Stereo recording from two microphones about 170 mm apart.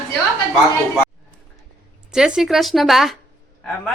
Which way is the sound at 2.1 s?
5° right (ahead or behind).